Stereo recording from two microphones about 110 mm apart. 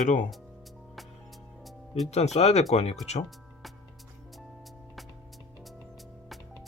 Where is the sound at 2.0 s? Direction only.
85° left.